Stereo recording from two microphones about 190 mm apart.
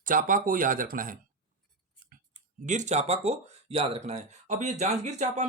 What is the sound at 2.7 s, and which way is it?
Speech, 40° right (ahead or behind).